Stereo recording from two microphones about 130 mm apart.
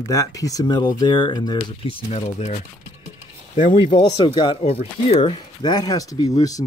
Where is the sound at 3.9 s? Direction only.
40° left (ahead or behind).